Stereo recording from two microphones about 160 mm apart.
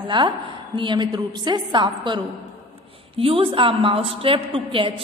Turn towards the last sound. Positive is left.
turn(degrees=-35)  # may be behind; listen again after turning